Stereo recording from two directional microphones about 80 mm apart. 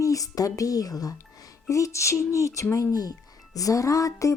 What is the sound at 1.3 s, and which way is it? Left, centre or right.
Music, left.